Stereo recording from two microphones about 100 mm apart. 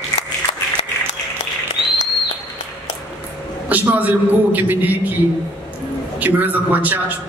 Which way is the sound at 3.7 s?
15° right (ahead or behind).